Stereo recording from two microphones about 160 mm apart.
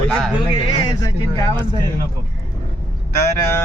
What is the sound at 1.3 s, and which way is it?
Speech, 30° right (ahead or behind).